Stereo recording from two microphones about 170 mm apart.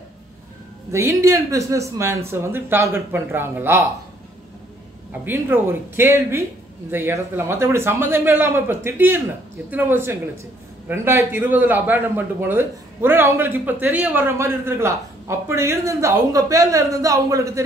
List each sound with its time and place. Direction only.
0.9 s a man's voice: 15° right (ahead or behind)
5.2 s a man's voice: 10° right (ahead or behind)